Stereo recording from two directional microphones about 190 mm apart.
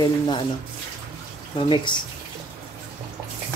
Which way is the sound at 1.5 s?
25° left (ahead or behind).